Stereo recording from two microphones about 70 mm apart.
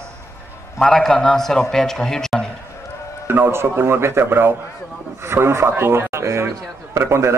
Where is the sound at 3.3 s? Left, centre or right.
Right.